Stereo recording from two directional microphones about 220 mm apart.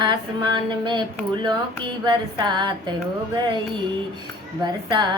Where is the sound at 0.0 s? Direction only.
20° right (ahead or behind).